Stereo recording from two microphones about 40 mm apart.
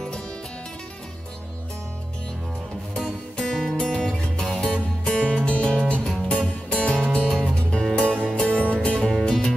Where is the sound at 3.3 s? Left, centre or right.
Left.